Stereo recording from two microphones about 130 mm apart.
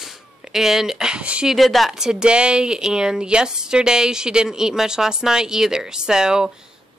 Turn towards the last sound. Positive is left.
turn(degrees=-5)  # may be behind; listen again after turning